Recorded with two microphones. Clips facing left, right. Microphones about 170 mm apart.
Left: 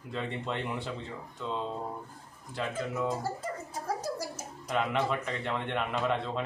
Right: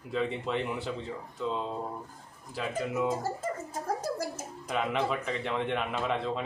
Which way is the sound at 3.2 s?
50° right (ahead or behind).